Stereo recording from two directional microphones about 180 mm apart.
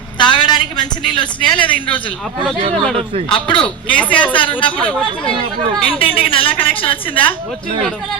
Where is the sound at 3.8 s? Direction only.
5° left (ahead or behind).